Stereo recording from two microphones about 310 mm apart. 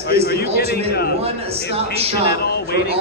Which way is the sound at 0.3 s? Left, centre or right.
Left.